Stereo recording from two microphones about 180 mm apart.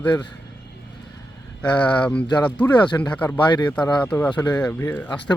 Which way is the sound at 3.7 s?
10° left (ahead or behind).